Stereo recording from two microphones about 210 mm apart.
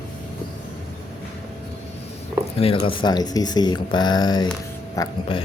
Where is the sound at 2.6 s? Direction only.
25° left (ahead or behind).